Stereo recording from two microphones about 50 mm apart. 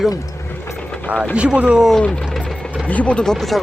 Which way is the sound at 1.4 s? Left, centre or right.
Right.